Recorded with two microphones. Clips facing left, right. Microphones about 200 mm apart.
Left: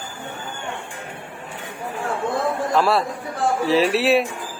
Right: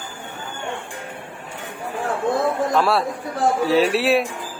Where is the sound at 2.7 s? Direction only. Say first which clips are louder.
Even; centre (ahead or behind).